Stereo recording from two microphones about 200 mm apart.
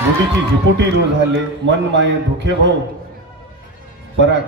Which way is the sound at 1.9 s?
60° right (ahead or behind).